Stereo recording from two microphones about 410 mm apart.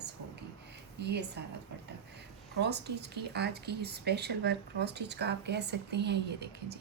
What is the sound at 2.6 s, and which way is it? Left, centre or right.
Speech, right.